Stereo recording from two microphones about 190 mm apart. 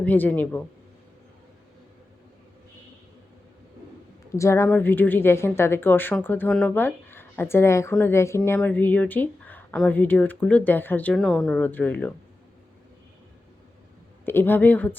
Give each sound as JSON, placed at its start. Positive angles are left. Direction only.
{"t": 0.0, "sound": "speech", "side_deg": 10}
{"t": 4.4, "sound": "speech", "side_deg": 15}
{"t": 14.3, "sound": "speech", "side_deg": 10}